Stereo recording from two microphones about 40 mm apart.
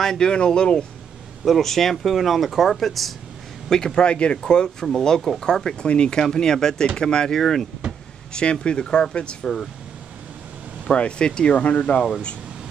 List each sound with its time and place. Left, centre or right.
0.0 s speech: centre
1.4 s speech: centre
3.7 s speech: centre
4.4 s speech: centre
7.3 s speech: centre
8.3 s speech: left
10.9 s speech: left
11.5 s speech: left